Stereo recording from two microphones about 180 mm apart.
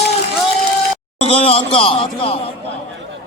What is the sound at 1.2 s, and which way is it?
A man's voice, 35° left (ahead or behind).